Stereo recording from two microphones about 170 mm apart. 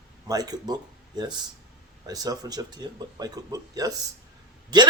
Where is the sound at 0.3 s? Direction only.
20° right (ahead or behind).